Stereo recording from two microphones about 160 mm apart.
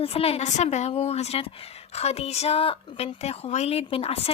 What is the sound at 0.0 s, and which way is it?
A woman's voice, 40° left (ahead or behind).